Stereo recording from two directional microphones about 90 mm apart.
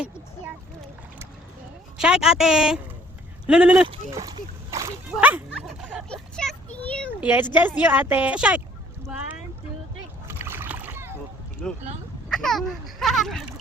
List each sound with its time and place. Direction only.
2.0 s a woman's voice: 5° right (ahead or behind)
4.1 s a sound: 40° right (ahead or behind)
6.1 s vehicle: 10° left (ahead or behind)
6.8 s a sound: 15° left (ahead or behind)
7.2 s a woman's voice: 20° right (ahead or behind)
10.2 s splash: 25° right (ahead or behind)
11.6 s speech: 10° left (ahead or behind)